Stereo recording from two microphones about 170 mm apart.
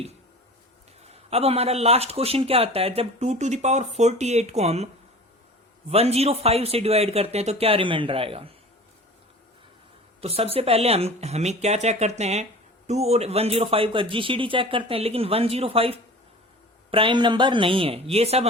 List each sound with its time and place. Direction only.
1.0 s a man's voice: 35° right (ahead or behind)
5.9 s a man's voice: 35° right (ahead or behind)
10.2 s a man's voice: 35° right (ahead or behind)